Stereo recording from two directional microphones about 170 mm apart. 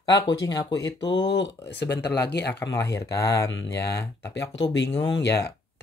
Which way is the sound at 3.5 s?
80° left.